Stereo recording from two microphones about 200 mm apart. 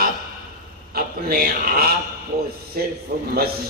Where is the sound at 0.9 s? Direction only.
50° right (ahead or behind).